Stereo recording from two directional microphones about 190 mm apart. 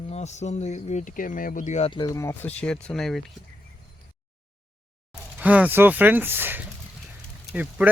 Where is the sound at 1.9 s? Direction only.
20° left (ahead or behind); by 3.2 s centre (ahead or behind).